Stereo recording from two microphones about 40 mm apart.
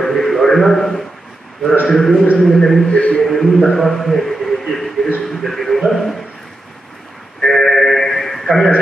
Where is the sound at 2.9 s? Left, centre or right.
Left.